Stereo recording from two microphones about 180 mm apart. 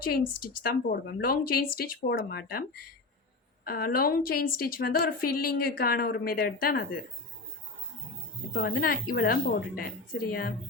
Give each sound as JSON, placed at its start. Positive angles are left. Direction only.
{"t": 0.0, "sound": "a woman's voice", "side_deg": 55}
{"t": 8.5, "sound": "a woman's voice", "side_deg": 60}